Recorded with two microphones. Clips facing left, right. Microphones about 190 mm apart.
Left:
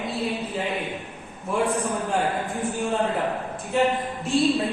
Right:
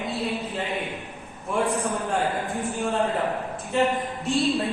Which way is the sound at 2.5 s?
Centre (ahead or behind).